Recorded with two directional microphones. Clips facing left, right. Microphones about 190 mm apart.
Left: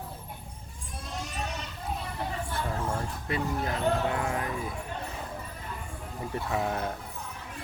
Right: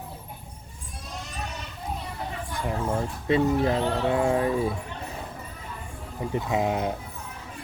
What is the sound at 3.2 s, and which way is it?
Speech, 25° right (ahead or behind).